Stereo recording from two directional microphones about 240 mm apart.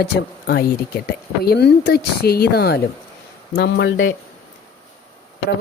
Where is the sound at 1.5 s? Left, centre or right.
Left.